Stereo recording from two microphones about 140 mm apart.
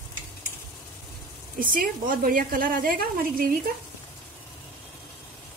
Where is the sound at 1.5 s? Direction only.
80° right.